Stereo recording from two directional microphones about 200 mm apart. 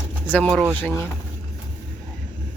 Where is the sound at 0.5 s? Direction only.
5° right (ahead or behind).